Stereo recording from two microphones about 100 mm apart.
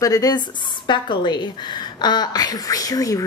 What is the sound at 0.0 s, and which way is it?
Speech, 40° left (ahead or behind).